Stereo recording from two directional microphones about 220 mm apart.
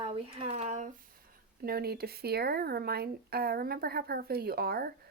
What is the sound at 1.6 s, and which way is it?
Speech, 45° right (ahead or behind).